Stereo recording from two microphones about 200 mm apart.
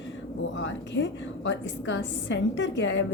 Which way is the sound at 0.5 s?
65° left (ahead or behind).